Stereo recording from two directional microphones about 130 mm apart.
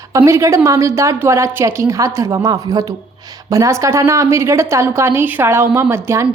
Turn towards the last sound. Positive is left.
turn(degrees=-20)  # may be behind; listen again after turning